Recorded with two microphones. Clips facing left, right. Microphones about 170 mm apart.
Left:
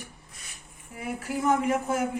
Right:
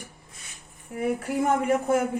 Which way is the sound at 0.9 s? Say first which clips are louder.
Right 6 dB; 60° right (ahead or behind).